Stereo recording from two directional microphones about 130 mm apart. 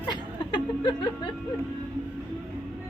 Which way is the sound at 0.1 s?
40° left (ahead or behind).